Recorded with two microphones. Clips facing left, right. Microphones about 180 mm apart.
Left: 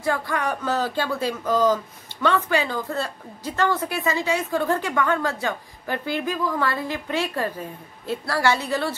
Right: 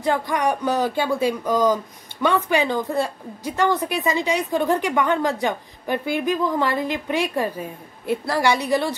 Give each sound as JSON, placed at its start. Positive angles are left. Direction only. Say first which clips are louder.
{"t": 0.0, "sound": "a woman's voice", "louder": "right 4 dB", "side_deg": -20}